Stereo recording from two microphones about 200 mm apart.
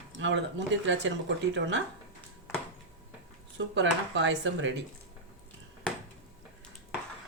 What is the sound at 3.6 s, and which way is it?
Speech, 65° right (ahead or behind).